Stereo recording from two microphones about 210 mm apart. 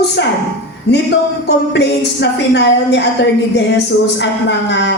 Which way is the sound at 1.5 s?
55° left (ahead or behind).